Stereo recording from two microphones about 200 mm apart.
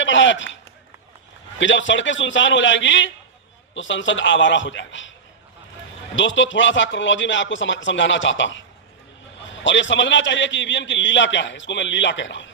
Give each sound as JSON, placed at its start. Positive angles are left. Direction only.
{"t": 0.0, "sound": "speech", "side_deg": 70}
{"t": 6.1, "sound": "a man's voice", "side_deg": 70}